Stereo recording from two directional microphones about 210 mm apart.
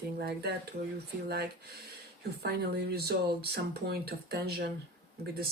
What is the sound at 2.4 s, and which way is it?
Speech, 50° right (ahead or behind).